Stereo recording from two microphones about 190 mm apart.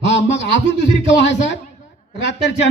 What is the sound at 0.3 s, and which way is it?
A man's voice, 65° left (ahead or behind).